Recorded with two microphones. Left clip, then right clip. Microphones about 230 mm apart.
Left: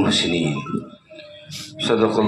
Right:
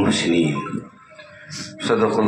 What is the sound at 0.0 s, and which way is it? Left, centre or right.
Speech, left.